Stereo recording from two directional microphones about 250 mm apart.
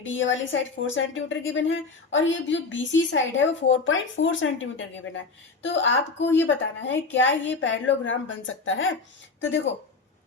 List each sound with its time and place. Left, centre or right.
0.0 s a woman's voice: left